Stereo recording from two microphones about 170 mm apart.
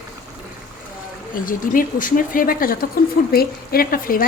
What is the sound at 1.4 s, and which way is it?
A woman's voice, 55° left (ahead or behind).